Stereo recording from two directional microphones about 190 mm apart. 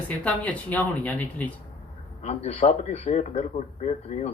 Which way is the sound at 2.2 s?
35° left (ahead or behind).